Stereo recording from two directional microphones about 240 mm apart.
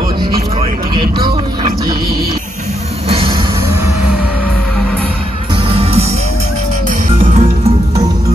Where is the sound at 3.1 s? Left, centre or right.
Right.